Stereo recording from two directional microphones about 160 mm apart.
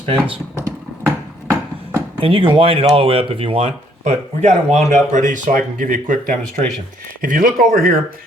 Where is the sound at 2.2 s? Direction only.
35° right (ahead or behind).